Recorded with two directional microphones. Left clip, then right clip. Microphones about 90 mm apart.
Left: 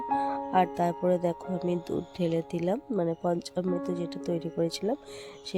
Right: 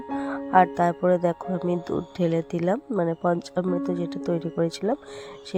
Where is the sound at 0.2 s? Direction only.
20° right (ahead or behind).